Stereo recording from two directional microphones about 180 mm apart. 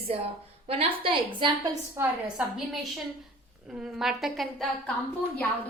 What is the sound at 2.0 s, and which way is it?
Speech, 15° right (ahead or behind).